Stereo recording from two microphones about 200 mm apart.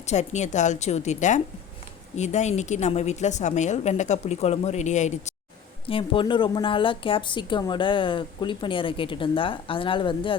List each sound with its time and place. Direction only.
0.0 s a woman's voice: 35° left (ahead or behind)